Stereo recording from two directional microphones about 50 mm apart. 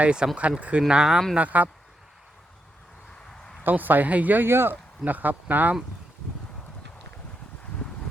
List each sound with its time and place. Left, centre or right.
0.0 s speech: centre
1.4 s speech: right
3.6 s speech: right
4.4 s speech: right